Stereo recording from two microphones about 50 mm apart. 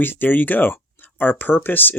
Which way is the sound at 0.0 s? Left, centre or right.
Left.